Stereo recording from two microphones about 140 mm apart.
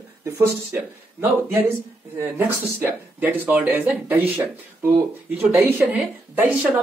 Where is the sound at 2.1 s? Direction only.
15° right (ahead or behind).